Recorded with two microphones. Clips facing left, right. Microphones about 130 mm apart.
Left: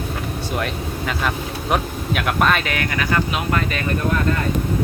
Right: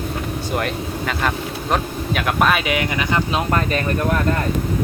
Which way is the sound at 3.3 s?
35° right (ahead or behind).